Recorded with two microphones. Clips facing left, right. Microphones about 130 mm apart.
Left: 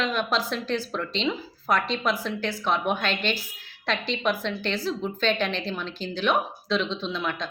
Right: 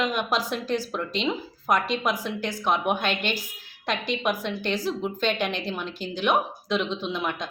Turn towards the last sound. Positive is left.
turn(degrees=-15)  # may be behind; listen again after turning